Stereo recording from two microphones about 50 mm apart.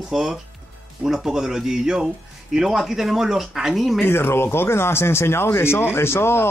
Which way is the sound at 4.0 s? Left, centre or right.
Left.